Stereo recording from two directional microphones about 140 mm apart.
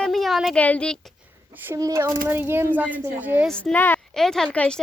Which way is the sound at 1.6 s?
25° right (ahead or behind).